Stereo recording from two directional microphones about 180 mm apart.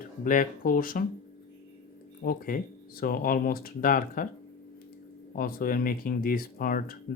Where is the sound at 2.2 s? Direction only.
55° left (ahead or behind).